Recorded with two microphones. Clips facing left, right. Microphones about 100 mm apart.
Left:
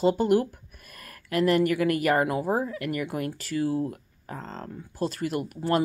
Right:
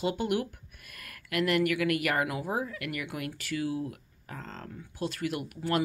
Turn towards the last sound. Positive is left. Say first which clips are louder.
# left 5 dB
turn(degrees=35)  # may be behind; listen again after turning